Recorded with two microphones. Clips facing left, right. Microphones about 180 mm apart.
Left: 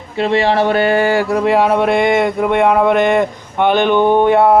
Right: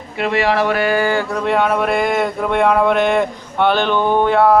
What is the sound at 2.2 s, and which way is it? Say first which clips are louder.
Speech: left 3 dB; 5° left (ahead or behind).